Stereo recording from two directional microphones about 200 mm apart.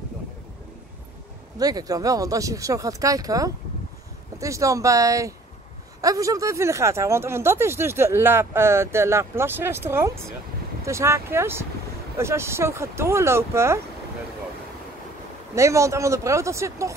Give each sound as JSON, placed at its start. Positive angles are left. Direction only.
{"t": 1.6, "sound": "speech", "side_deg": -20}
{"t": 15.5, "sound": "speech", "side_deg": -15}